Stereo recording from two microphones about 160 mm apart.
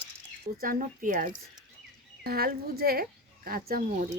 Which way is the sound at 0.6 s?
60° right (ahead or behind).